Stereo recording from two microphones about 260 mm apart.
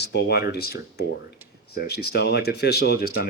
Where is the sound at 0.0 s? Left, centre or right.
Left.